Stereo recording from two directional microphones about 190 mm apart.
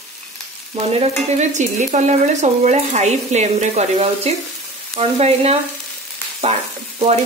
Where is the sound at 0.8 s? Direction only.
30° right (ahead or behind).